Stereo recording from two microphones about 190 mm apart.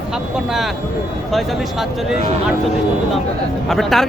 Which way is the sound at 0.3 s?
Centre (ahead or behind).